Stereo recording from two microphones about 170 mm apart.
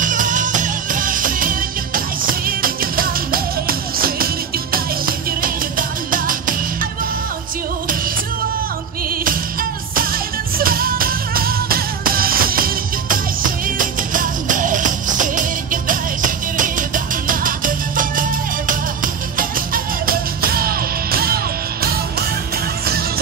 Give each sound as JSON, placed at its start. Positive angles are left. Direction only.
{"t": 0.0, "sound": "music", "side_deg": -50}
{"t": 9.2, "sound": "music", "side_deg": -55}
{"t": 19.3, "sound": "music", "side_deg": -55}